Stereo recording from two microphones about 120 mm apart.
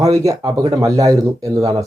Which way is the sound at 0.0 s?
30° right (ahead or behind).